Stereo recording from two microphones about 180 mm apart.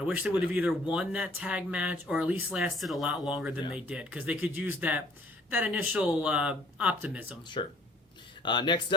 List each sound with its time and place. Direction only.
0.1 s speech: 10° right (ahead or behind)
7.6 s speech: 35° left (ahead or behind)